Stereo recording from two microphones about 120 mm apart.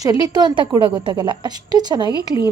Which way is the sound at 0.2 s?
35° right (ahead or behind).